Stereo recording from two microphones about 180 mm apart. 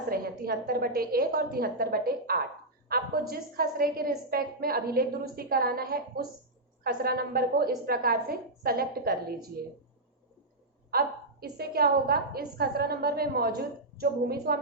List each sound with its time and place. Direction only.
0.1 s a woman's voice: 55° right (ahead or behind)
10.9 s a woman's voice: 60° right (ahead or behind)